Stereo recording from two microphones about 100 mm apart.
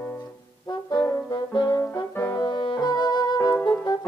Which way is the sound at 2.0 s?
35° left (ahead or behind).